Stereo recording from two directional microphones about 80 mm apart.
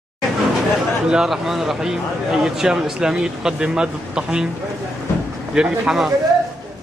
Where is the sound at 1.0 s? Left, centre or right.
Centre.